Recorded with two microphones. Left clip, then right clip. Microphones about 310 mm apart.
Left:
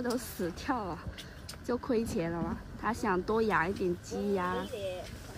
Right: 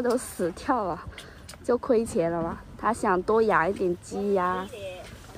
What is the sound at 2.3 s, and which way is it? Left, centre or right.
Speech, right.